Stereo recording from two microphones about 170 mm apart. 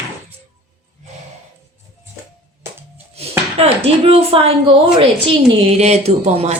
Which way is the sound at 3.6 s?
35° right (ahead or behind).